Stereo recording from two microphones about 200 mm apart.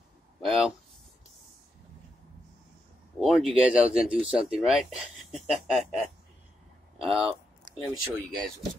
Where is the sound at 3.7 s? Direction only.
5° right (ahead or behind).